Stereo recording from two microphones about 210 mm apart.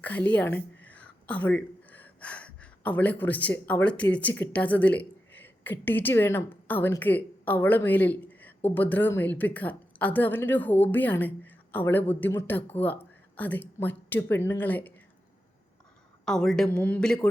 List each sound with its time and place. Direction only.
0.0 s a sound: 5° left (ahead or behind)
3.7 s speech: 5° left (ahead or behind)
16.2 s a woman's voice: centre (ahead or behind)